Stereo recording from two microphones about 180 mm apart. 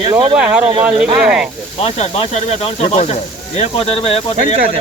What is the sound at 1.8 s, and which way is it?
Speech, 35° left (ahead or behind).